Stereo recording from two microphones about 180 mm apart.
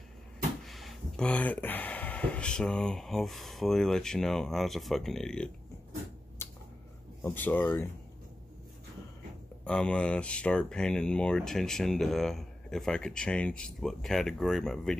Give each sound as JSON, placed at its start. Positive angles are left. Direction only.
{"t": 0.7, "sound": "speech", "side_deg": 0}
{"t": 7.2, "sound": "speech", "side_deg": 10}
{"t": 9.7, "sound": "speech", "side_deg": 5}